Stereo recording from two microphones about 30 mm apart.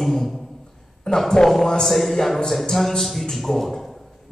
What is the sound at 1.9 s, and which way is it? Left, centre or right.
A man's voice, centre.